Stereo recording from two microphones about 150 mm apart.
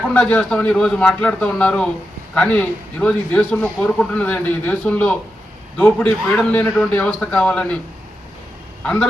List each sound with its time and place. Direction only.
0.1 s a man's voice: 10° left (ahead or behind)
8.8 s speech: 10° left (ahead or behind)